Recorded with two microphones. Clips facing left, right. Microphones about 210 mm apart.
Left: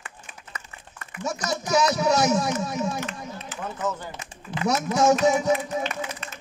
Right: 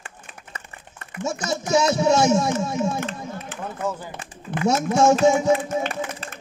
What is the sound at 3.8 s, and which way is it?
Speech, 10° right (ahead or behind).